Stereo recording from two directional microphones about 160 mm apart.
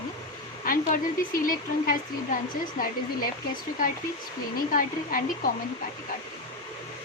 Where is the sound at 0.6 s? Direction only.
60° left (ahead or behind).